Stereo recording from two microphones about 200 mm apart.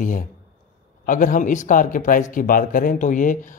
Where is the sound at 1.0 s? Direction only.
40° left (ahead or behind).